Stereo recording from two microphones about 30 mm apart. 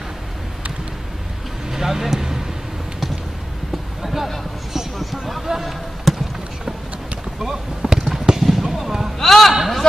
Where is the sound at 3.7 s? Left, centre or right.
Centre.